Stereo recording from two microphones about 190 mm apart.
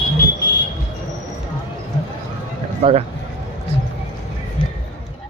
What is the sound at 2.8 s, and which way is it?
Speech, 30° right (ahead or behind).